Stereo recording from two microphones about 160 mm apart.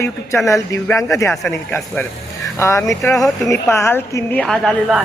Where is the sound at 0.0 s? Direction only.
20° left (ahead or behind).